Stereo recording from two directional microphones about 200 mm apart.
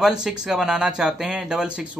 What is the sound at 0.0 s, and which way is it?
Speech, 5° right (ahead or behind).